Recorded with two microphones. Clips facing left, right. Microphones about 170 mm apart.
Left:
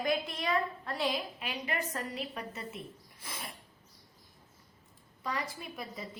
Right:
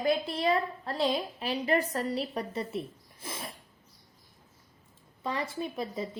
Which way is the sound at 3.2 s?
25° right (ahead or behind).